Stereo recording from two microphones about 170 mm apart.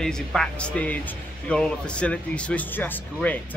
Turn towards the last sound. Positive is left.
turn(degrees=10)  # may be behind; listen again after turning